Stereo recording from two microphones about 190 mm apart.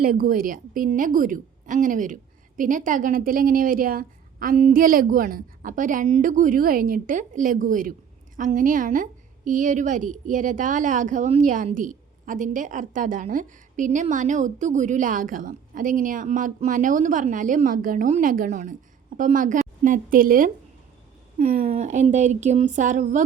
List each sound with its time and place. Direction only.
0.0 s a woman's voice: 50° right (ahead or behind)